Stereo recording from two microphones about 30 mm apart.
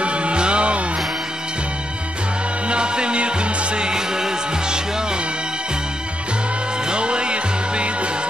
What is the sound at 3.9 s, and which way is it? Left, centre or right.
Music, right.